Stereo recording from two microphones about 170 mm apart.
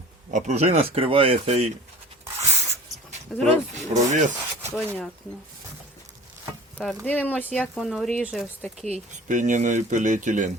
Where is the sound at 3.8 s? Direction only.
45° right (ahead or behind).